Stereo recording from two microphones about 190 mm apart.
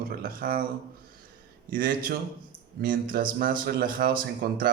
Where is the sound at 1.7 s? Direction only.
45° right (ahead or behind).